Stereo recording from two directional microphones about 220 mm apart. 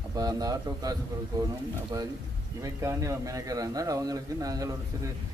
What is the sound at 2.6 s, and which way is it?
A man's voice, 15° right (ahead or behind).